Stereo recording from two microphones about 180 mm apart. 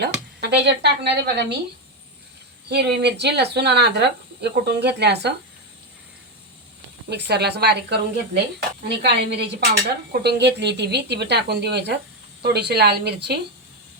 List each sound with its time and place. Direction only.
0.0 s speech: 65° right (ahead or behind)
2.6 s speech: 70° right (ahead or behind)
7.1 s a woman's voice: 65° right (ahead or behind)